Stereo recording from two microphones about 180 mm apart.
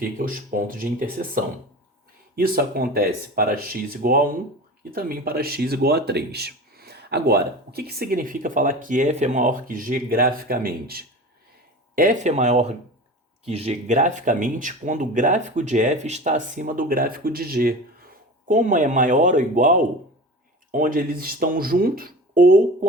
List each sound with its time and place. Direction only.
0.0 s speech: 50° right (ahead or behind)
2.3 s speech: 55° right (ahead or behind)
11.9 s speech: 45° right (ahead or behind)